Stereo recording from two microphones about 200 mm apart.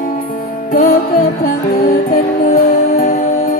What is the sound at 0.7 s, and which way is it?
Music, 45° left (ahead or behind).